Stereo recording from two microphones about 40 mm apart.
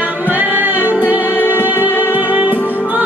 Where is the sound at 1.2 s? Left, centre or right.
Left.